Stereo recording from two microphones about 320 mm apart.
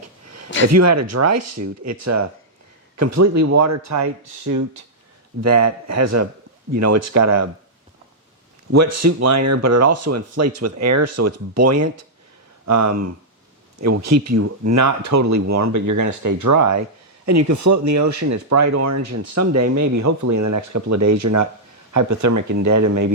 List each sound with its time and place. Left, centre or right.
0.7 s speech: right
8.7 s speech: right